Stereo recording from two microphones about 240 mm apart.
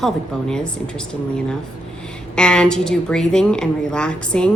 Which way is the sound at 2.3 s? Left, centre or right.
Centre.